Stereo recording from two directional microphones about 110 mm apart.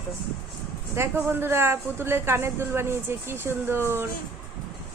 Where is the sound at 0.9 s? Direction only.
20° right (ahead or behind).